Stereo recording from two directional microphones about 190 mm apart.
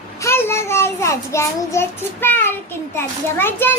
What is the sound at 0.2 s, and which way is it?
A child's voice, 15° left (ahead or behind).